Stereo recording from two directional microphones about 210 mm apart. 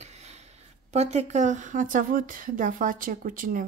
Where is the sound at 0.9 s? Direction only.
30° right (ahead or behind).